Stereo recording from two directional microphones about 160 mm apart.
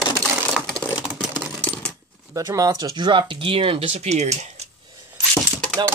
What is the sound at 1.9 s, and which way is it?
Speech, 20° right (ahead or behind).